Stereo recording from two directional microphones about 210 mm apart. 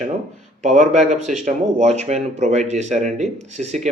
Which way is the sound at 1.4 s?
35° right (ahead or behind).